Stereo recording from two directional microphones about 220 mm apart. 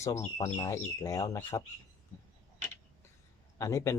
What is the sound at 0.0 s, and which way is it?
Speech, 15° left (ahead or behind).